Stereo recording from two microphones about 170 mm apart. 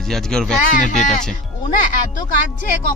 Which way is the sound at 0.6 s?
50° left (ahead or behind).